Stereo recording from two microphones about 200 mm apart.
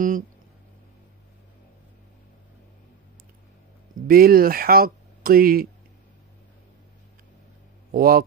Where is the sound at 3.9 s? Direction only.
45° right (ahead or behind).